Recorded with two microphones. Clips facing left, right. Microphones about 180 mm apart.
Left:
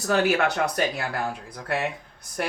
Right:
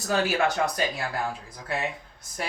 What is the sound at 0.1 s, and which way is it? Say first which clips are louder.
Speech: left 3 dB; 65° left (ahead or behind).